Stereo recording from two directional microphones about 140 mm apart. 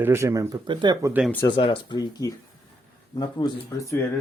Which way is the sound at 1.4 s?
35° left (ahead or behind).